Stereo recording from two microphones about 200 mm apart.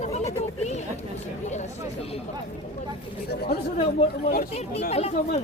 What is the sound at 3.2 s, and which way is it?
Speech, 50° left (ahead or behind).